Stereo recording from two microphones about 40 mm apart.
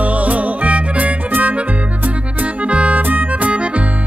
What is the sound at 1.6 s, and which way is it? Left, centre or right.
Accordion, right.